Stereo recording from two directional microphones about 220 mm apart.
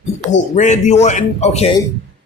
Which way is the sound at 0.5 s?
30° left (ahead or behind).